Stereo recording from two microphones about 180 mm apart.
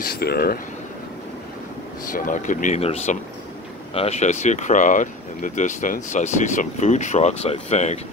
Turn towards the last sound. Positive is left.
turn(degrees=40)  # may be behind; listen again after turning